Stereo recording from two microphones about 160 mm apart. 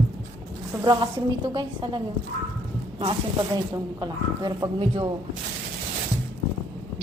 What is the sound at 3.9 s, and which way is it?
A woman's voice, 25° right (ahead or behind).